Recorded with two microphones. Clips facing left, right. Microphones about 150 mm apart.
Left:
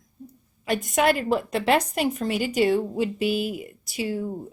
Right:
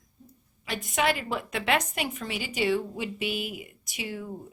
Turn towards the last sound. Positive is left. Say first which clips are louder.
# left 8 dB
turn(degrees=35)  # may be behind; listen again after turning